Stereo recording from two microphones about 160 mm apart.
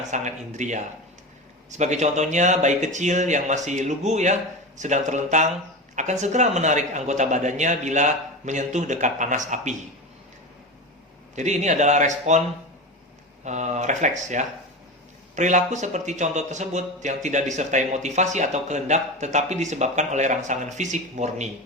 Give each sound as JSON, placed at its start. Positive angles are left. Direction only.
{"t": 0.1, "sound": "speech", "side_deg": -50}
{"t": 1.8, "sound": "speech", "side_deg": -45}
{"t": 11.3, "sound": "speech", "side_deg": -45}
{"t": 13.4, "sound": "speech", "side_deg": -50}